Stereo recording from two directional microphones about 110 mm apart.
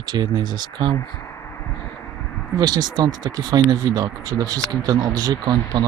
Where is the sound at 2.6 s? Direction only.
40° right (ahead or behind).